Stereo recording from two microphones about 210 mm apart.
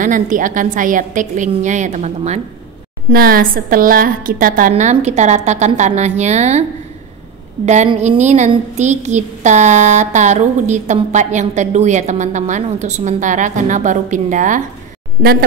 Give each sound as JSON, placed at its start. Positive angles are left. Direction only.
{"t": 0.0, "sound": "a woman's voice", "side_deg": -40}
{"t": 3.1, "sound": "a woman's voice", "side_deg": -40}
{"t": 7.6, "sound": "a woman's voice", "side_deg": -35}